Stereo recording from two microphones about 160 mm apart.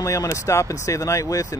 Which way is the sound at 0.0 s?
20° left (ahead or behind).